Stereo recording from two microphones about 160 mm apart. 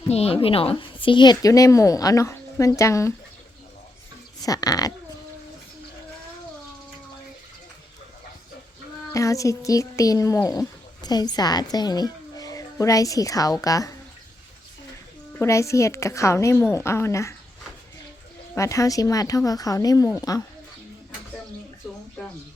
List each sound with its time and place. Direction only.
0.1 s a woman's voice: 40° left (ahead or behind); by 3.1 s 20° left (ahead or behind)
4.4 s a woman's voice: 25° left (ahead or behind)
9.1 s speech: 20° left (ahead or behind)
15.3 s a woman's voice: 15° left (ahead or behind)
18.5 s a woman's voice: 20° left (ahead or behind)